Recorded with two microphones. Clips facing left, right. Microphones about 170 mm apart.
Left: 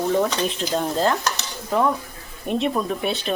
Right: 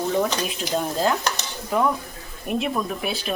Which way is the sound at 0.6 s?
5° right (ahead or behind).